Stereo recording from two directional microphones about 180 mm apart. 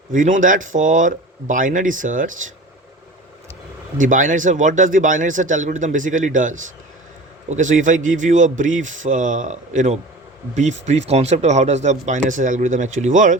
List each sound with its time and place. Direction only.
0.1 s speech: 45° right (ahead or behind)
3.9 s speech: 45° right (ahead or behind)